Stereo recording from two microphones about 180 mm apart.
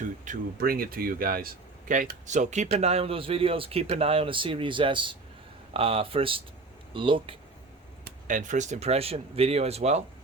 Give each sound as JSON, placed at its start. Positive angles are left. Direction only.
{"t": 0.3, "sound": "speech", "side_deg": -55}
{"t": 8.0, "sound": "speech", "side_deg": -45}